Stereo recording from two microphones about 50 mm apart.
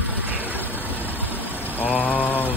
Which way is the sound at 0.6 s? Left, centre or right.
Left.